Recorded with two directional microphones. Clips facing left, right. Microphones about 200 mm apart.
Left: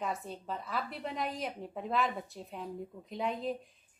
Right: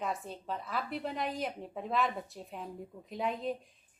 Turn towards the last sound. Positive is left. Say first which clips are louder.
# even
turn(degrees=0)  # may be behind; listen again after turning